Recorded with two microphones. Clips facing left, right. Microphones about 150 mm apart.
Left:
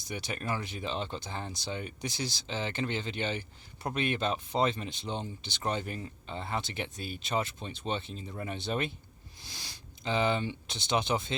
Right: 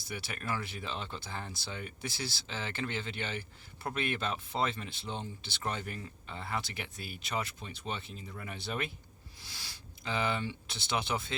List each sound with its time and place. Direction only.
0.0 s speech: 20° left (ahead or behind)